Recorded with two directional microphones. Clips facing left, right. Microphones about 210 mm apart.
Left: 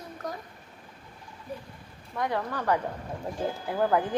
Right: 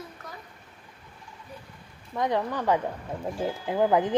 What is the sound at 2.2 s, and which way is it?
Speech, 20° right (ahead or behind).